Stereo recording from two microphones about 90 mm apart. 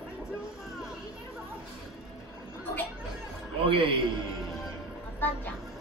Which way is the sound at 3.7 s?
70° right (ahead or behind).